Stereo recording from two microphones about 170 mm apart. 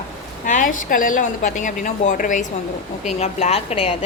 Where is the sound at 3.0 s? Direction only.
40° left (ahead or behind).